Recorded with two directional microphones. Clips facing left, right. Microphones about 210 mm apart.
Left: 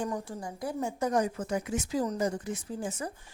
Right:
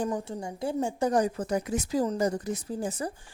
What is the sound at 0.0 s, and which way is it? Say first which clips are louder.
A woman's voice: right 3 dB; 25° right (ahead or behind).